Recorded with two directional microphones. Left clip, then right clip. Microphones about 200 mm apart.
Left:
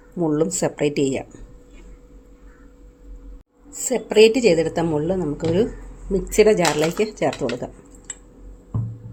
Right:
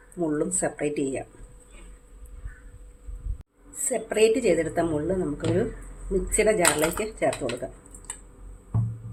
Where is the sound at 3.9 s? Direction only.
45° left (ahead or behind).